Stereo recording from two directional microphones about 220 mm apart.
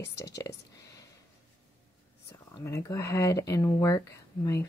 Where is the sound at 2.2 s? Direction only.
15° left (ahead or behind).